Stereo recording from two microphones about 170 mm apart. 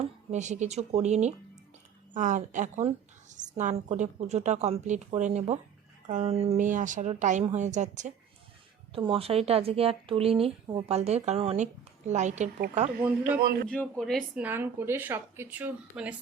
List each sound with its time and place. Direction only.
0.3 s a woman's voice: 45° right (ahead or behind)
8.9 s speech: 35° right (ahead or behind)
13.0 s speech: 10° right (ahead or behind)
13.7 s speech: 5° left (ahead or behind)
14.4 s speech: 10° right (ahead or behind)